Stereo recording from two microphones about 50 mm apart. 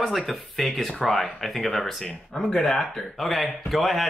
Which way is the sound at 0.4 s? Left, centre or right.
Centre.